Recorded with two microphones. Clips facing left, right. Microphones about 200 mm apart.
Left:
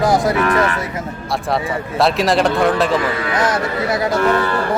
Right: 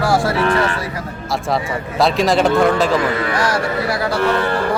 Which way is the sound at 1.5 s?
Centre (ahead or behind).